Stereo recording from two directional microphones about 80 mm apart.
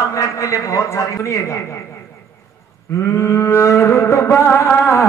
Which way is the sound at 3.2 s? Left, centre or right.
Left.